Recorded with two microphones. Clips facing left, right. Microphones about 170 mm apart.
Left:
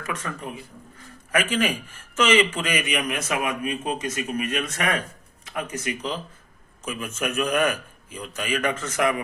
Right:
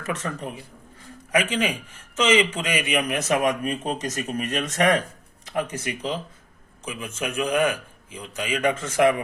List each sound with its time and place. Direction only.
0.2 s speech: 35° right (ahead or behind)
1.3 s a man's voice: 15° right (ahead or behind); by 6.0 s 30° right (ahead or behind)
6.9 s a man's voice: 15° right (ahead or behind); by 9.2 s 30° right (ahead or behind)